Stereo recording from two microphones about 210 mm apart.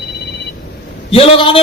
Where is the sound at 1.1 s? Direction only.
25° left (ahead or behind).